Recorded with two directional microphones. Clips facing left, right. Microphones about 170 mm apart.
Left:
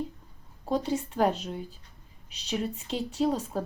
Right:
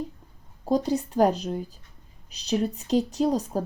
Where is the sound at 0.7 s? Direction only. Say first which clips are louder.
Right 4 dB; 40° right (ahead or behind).